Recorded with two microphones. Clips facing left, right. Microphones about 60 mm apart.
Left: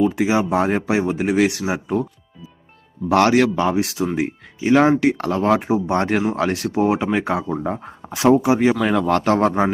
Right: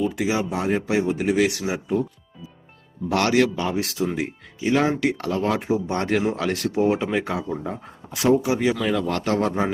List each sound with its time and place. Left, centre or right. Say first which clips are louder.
0.0 s speech: left 5 dB; left
3.1 s speech: left 7 dB; left
3.3 s speech: left 4 dB; left